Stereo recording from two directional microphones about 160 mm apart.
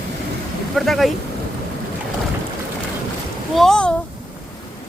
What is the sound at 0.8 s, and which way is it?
Speech, centre (ahead or behind).